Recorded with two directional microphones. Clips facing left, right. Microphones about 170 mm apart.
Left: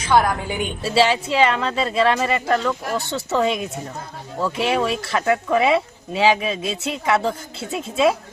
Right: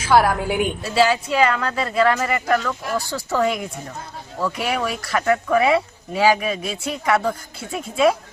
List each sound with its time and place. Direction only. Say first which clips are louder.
0.0 s a woman's voice: right 1 dB; 5° right (ahead or behind)
0.8 s speech: left 4 dB; 30° left (ahead or behind)